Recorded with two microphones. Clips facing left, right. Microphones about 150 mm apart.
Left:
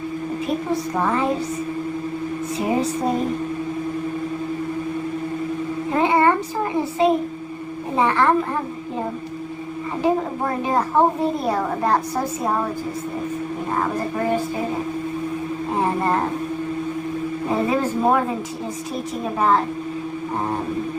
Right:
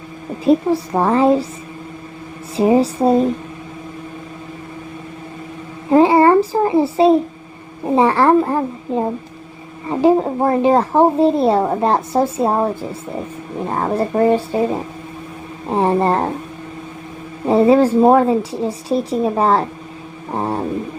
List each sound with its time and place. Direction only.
0.4 s a child's voice: 35° right (ahead or behind)
2.6 s a child's voice: 35° right (ahead or behind)
5.9 s a child's voice: 35° right (ahead or behind)
9.9 s a woman's voice: 30° right (ahead or behind)
13.7 s a child's voice: 35° right (ahead or behind)
15.8 s a child's voice: 30° right (ahead or behind)
17.5 s a child's voice: 30° right (ahead or behind)